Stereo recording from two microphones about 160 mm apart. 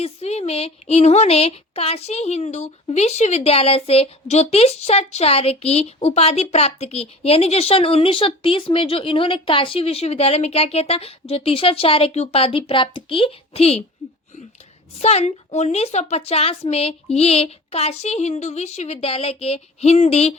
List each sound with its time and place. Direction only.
0.0 s speech: 40° left (ahead or behind)
15.0 s speech: 40° left (ahead or behind)